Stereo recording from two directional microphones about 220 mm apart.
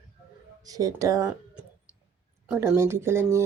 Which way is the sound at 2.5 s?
10° right (ahead or behind).